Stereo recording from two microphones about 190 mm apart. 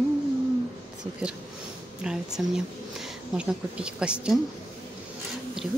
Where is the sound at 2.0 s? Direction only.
5° right (ahead or behind).